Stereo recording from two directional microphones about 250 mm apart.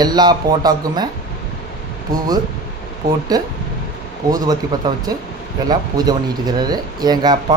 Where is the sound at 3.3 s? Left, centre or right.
Centre.